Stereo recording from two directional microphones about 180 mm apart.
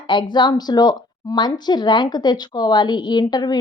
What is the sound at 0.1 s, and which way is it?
Speech, 25° left (ahead or behind).